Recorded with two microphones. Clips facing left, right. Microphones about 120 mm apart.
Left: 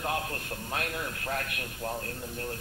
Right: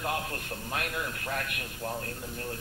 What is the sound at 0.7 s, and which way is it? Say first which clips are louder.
A man's voice: even; 35° left (ahead or behind).